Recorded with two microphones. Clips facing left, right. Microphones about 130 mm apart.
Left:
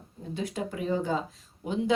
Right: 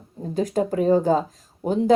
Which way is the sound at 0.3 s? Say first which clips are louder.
Right 11 dB; 40° right (ahead or behind).